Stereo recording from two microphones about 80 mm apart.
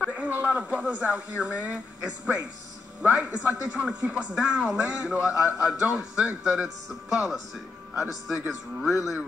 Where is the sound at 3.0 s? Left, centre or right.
Centre.